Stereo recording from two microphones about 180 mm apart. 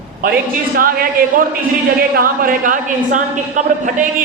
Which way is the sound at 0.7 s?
55° right (ahead or behind).